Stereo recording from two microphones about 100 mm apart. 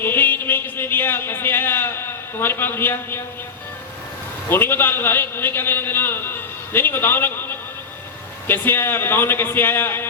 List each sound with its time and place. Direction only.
0.0 s a man's voice: 20° left (ahead or behind)
4.4 s a man's voice: 20° left (ahead or behind)